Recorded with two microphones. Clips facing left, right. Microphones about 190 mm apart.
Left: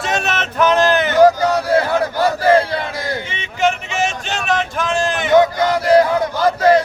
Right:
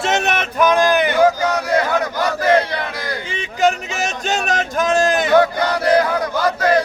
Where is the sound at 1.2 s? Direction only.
35° left (ahead or behind).